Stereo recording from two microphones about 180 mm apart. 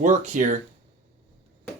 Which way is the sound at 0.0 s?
45° right (ahead or behind).